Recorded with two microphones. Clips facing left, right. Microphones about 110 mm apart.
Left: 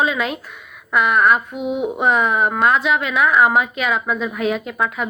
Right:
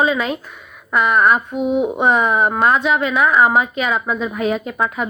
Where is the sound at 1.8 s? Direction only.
Centre (ahead or behind).